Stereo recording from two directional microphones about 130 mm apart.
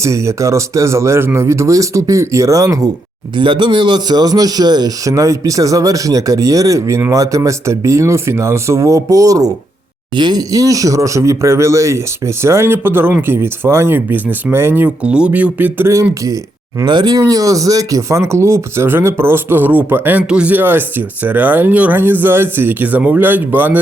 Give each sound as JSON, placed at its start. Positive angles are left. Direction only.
{"t": 0.0, "sound": "speech", "side_deg": -20}
{"t": 3.3, "sound": "speech", "side_deg": -35}